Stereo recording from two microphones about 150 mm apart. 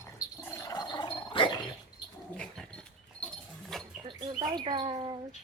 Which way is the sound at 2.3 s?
5° left (ahead or behind).